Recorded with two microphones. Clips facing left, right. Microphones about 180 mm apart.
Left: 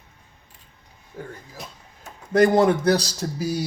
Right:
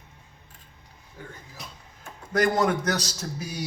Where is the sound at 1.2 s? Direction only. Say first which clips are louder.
Left 7 dB; 45° left (ahead or behind).